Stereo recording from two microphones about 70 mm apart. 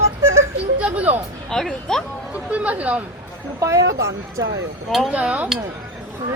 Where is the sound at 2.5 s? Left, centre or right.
Right.